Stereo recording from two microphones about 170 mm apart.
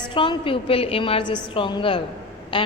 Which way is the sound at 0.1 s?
30° left (ahead or behind).